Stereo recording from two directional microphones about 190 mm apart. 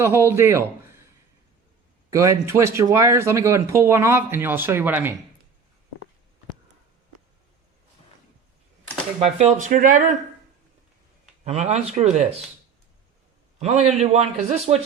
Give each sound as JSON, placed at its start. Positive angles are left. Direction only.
{"t": 0.0, "sound": "speech", "side_deg": -15}
{"t": 2.0, "sound": "speech", "side_deg": -15}
{"t": 9.2, "sound": "speech", "side_deg": -35}
{"t": 11.4, "sound": "a man's voice", "side_deg": -35}
{"t": 13.6, "sound": "a man's voice", "side_deg": -35}